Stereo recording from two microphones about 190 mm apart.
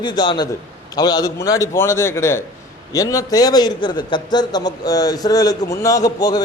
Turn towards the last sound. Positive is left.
turn(degrees=20)  # may be behind; listen again after turning